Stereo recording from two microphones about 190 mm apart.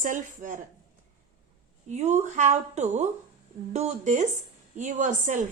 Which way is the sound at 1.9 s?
35° right (ahead or behind).